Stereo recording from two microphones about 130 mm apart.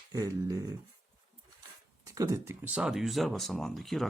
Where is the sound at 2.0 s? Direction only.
25° right (ahead or behind).